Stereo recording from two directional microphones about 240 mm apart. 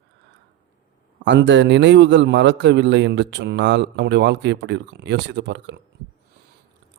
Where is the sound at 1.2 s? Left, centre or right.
Right.